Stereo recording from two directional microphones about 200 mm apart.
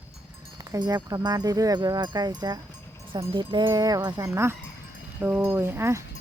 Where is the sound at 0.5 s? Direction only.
20° right (ahead or behind).